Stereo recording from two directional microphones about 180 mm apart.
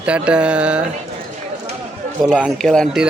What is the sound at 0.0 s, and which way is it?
Mantra, 5° right (ahead or behind).